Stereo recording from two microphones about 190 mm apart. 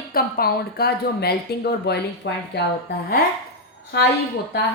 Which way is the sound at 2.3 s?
70° left (ahead or behind).